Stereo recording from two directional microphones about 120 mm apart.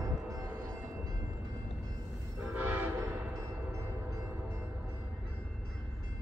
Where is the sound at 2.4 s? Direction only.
10° right (ahead or behind).